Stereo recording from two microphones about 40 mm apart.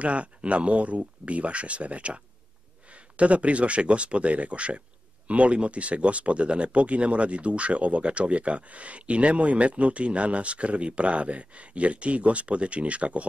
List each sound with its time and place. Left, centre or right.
0.0 s speech: right